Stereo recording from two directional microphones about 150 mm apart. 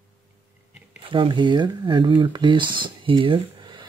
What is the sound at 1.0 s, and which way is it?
Speech, 35° right (ahead or behind).